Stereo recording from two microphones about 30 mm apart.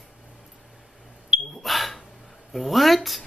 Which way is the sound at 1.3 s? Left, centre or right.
Right.